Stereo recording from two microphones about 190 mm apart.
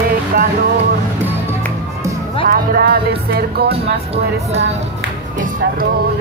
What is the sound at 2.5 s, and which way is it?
Music, 50° right (ahead or behind).